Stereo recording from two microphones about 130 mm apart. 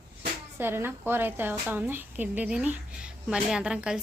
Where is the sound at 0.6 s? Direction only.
15° right (ahead or behind).